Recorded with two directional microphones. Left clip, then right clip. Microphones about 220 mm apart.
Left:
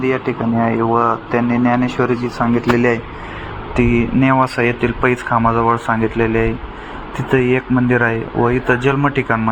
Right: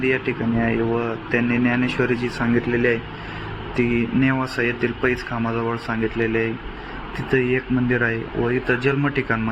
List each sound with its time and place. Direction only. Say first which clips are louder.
0.0 s speech: left 4 dB; 5° left (ahead or behind)
2.7 s speech: left 4 dB; 20° left (ahead or behind)